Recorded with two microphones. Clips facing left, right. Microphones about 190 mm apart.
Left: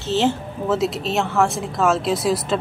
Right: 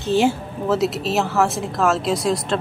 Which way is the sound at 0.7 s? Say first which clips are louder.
Right 1 dB; centre (ahead or behind).